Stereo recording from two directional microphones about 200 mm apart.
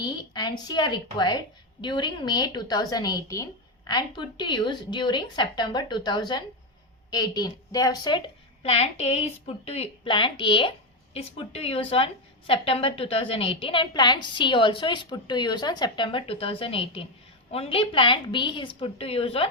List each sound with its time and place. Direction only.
0.0 s a woman's voice: 20° left (ahead or behind)
8.6 s a woman's voice: 30° left (ahead or behind)